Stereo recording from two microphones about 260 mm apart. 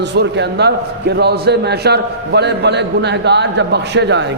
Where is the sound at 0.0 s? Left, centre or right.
Right.